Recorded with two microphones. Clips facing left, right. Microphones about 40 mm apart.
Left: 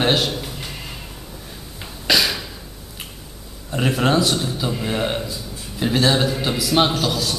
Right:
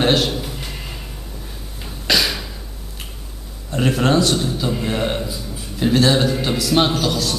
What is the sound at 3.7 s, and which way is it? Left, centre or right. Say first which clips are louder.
A man's voice: right 2 dB; centre.